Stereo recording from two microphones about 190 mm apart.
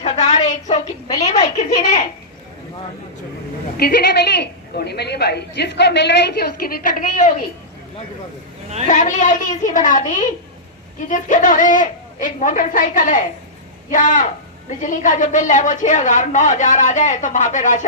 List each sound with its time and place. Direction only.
0.0 s a sound: 35° left (ahead or behind)
1.1 s a woman's voice: 35° left (ahead or behind)
3.8 s a woman's voice: 55° left (ahead or behind)
8.9 s a woman's voice: 40° left (ahead or behind)